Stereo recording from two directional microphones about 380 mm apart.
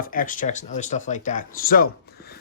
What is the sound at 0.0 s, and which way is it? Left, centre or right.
Speech, left.